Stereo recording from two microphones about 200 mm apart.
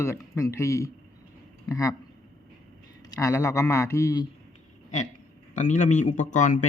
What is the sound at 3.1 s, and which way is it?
A man's voice, 15° left (ahead or behind).